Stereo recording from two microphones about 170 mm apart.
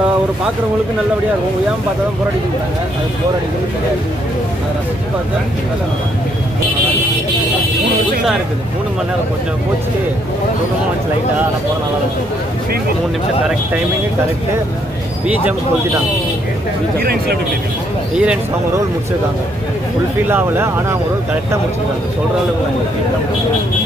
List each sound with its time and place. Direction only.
17.0 s speech: 65° right (ahead or behind)
18.1 s speech: 5° right (ahead or behind)
20.2 s speech: 10° right (ahead or behind)